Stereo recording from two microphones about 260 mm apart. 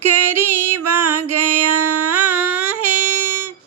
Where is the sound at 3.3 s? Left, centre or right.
Centre.